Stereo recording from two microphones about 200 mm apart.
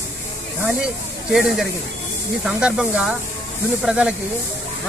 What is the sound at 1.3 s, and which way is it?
Speech, centre (ahead or behind).